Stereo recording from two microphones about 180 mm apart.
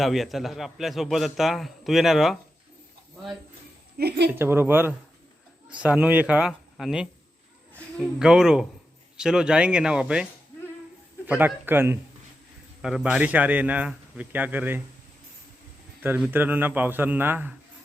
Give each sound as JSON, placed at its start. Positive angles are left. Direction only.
{"t": 0.0, "sound": "a man's voice", "side_deg": 0}
{"t": 3.9, "sound": "a woman's voice", "side_deg": -60}
{"t": 4.3, "sound": "a man's voice", "side_deg": -10}
{"t": 11.3, "sound": "a man's voice", "side_deg": -10}
{"t": 16.0, "sound": "a man's voice", "side_deg": -5}